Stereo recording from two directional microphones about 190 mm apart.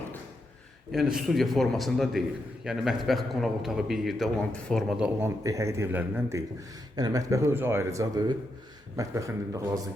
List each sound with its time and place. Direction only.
0.9 s a man's voice: centre (ahead or behind)
5.4 s speech: 15° right (ahead or behind)